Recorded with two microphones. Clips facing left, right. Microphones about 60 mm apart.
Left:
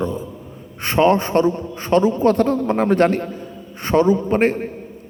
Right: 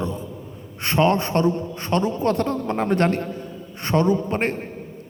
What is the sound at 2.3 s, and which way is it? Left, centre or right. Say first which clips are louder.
Mantra: left 5 dB; left.